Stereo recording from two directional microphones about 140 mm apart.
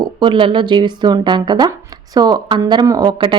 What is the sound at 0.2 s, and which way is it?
Speech, 35° right (ahead or behind).